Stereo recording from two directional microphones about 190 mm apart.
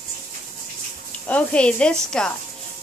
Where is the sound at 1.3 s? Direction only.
5° left (ahead or behind).